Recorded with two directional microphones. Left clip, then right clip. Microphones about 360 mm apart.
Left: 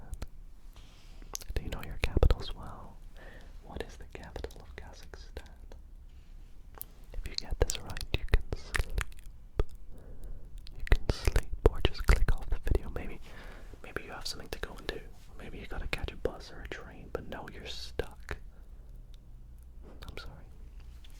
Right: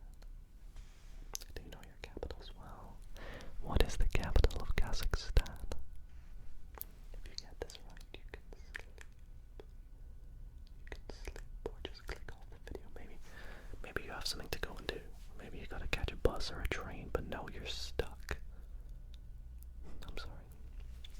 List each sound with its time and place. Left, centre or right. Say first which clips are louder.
1.3 s whispering: left 7 dB; centre
2.6 s whispering: left 7 dB; centre
3.2 s whispering: right 6 dB; right
6.8 s whispering: left 2 dB; centre
7.2 s whispering: left 12 dB; centre
9.6 s a sound: left 18 dB; left
10.6 s whispering: left 16 dB; left
13.3 s whispering: left 3 dB; centre
20.0 s whispering: left 3 dB; centre